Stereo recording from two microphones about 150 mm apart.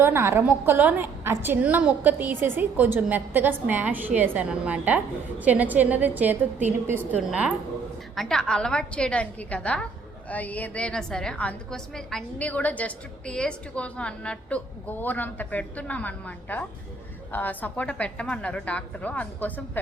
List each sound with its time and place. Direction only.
0.0 s a woman's voice: 15° right (ahead or behind); by 19.8 s 10° left (ahead or behind)